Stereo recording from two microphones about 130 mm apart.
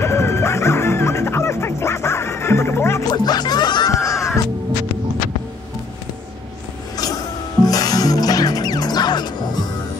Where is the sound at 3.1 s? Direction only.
30° left (ahead or behind).